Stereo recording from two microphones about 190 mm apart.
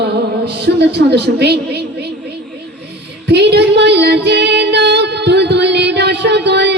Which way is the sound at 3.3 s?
60° right (ahead or behind).